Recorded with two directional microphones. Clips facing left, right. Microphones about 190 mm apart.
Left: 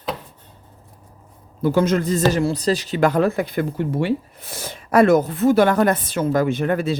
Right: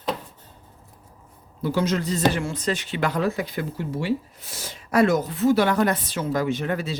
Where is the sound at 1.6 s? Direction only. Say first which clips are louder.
Left 6 dB; 50° left (ahead or behind).